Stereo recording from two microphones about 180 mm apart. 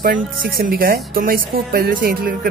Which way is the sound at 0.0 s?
55° right (ahead or behind).